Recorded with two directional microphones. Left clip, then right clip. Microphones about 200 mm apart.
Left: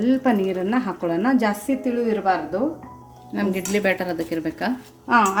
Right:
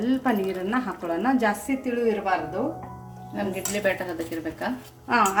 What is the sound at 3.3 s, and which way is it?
A woman's voice, 35° left (ahead or behind).